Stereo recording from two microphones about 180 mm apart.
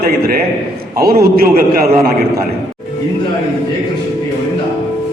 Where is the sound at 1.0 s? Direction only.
60° right (ahead or behind).